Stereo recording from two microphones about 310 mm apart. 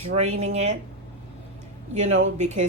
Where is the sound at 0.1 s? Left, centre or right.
Right.